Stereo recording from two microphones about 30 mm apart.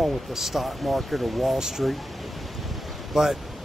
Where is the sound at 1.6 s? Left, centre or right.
Centre.